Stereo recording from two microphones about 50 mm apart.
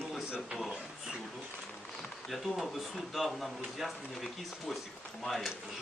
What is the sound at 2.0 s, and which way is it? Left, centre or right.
Speech, centre.